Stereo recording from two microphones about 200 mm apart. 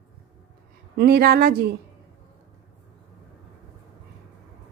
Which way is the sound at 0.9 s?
50° right (ahead or behind).